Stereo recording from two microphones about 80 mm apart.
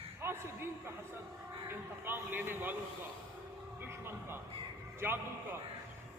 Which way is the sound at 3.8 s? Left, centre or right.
Right.